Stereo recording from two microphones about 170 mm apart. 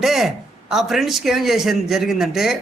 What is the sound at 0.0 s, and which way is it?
A man's voice, centre (ahead or behind).